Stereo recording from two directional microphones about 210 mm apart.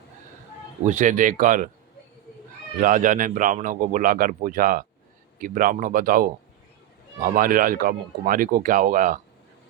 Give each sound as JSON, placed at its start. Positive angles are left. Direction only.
{"t": 0.9, "sound": "a man's voice", "side_deg": -35}
{"t": 2.8, "sound": "a man's voice", "side_deg": -40}
{"t": 7.3, "sound": "a man's voice", "side_deg": -40}